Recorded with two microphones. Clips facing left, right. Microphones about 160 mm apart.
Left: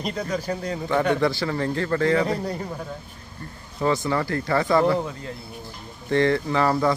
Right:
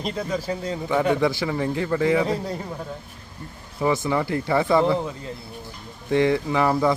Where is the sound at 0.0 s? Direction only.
5° right (ahead or behind).